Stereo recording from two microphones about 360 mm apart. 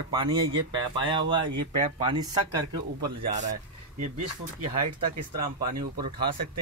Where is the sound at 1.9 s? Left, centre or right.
Centre.